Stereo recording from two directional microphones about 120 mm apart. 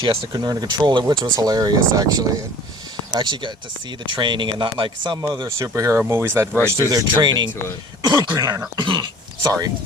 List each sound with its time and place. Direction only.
0.0 s speech: 35° right (ahead or behind)
3.2 s speech: 40° right (ahead or behind)
5.5 s speech: 25° right (ahead or behind)
6.5 s speech: 10° left (ahead or behind)
6.9 s speech: 35° right (ahead or behind)
9.4 s speech: 30° right (ahead or behind)